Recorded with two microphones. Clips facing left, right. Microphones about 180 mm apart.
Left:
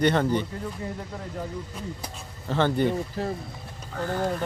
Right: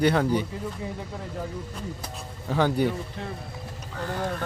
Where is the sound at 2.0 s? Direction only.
5° right (ahead or behind).